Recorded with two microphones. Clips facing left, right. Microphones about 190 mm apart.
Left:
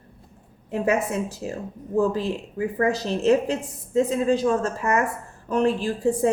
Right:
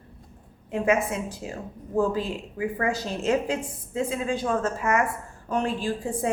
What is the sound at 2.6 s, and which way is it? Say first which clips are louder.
A woman's voice: left 3 dB; 40° left (ahead or behind).